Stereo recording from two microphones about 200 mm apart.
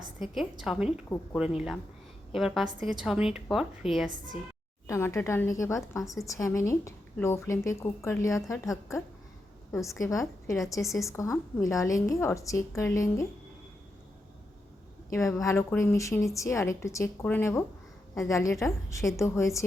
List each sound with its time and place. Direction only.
0.6 s a woman's voice: centre (ahead or behind)
4.9 s a woman's voice: 15° left (ahead or behind)
15.4 s a woman's voice: 10° left (ahead or behind)